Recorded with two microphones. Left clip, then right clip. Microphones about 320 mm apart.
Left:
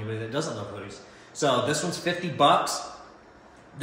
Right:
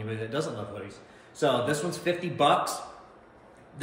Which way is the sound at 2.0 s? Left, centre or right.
Centre.